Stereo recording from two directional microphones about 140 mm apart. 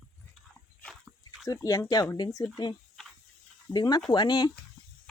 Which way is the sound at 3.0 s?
Centre (ahead or behind).